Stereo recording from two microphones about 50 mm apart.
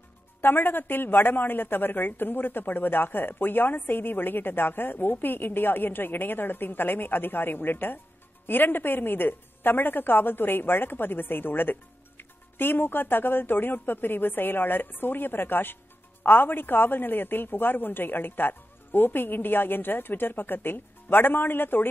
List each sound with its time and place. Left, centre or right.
0.4 s a woman's voice: left